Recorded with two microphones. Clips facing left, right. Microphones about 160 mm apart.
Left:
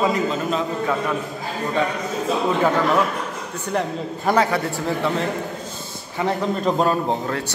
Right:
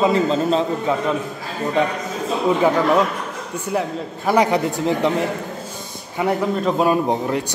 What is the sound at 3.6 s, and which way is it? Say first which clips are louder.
Speech: right 1 dB; 5° right (ahead or behind).